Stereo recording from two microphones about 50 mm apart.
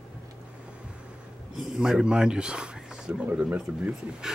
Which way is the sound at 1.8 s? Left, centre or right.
Centre.